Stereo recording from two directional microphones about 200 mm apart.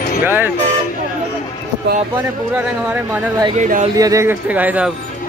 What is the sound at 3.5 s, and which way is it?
Speech, 40° right (ahead or behind).